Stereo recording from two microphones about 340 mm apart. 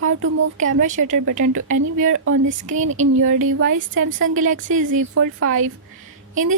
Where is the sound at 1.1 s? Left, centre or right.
Right.